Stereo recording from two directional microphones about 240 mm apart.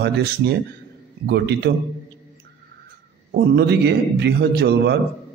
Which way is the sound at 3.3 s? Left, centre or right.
Right.